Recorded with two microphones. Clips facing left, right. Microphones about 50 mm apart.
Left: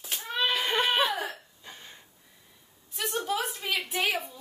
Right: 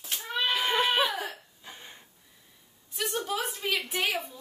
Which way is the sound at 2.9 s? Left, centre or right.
Centre.